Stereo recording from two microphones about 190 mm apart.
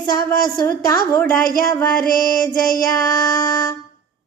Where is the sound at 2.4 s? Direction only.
20° left (ahead or behind).